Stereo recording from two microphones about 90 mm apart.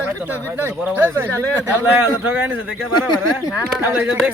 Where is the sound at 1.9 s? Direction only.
15° right (ahead or behind).